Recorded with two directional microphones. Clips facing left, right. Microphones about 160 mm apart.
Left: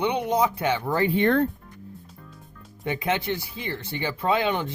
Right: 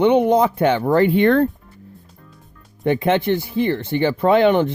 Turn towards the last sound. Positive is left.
turn(degrees=-60)  # may be behind; listen again after turning